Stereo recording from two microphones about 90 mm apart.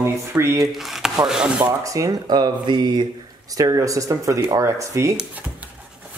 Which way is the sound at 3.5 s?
40° right (ahead or behind).